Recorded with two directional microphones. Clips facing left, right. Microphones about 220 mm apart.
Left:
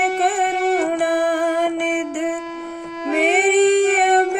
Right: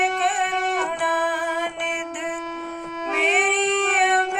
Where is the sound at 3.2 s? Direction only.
45° left (ahead or behind).